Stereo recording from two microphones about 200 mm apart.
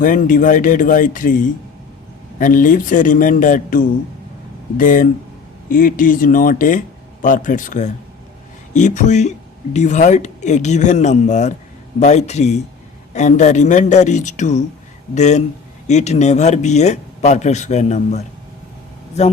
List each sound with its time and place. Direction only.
0.0 s speech: 40° left (ahead or behind)